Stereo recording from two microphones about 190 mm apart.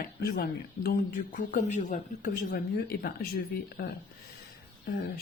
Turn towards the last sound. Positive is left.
turn(degrees=55)  # may be behind; listen again after turning